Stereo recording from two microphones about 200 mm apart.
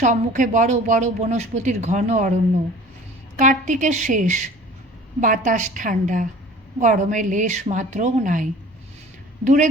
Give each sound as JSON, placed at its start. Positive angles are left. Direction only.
{"t": 0.0, "sound": "speech", "side_deg": -40}
{"t": 3.3, "sound": "speech", "side_deg": -40}